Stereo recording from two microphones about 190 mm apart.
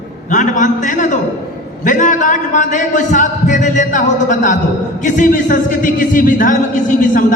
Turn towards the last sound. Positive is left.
turn(degrees=40)  # may be behind; listen again after turning